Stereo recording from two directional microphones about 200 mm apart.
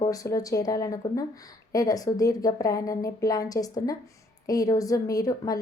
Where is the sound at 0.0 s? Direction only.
15° left (ahead or behind).